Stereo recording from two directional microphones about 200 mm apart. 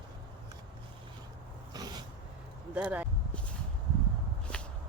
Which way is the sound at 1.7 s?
20° right (ahead or behind).